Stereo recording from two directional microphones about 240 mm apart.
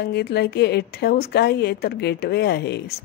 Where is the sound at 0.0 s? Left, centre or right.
Left.